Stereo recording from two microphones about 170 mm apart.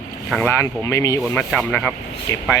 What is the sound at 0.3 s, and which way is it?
Speech, 10° left (ahead or behind).